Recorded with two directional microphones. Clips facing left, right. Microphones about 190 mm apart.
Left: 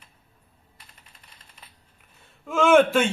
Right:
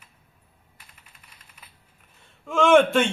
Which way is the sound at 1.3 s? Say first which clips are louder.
Left 1 dB; 10° right (ahead or behind).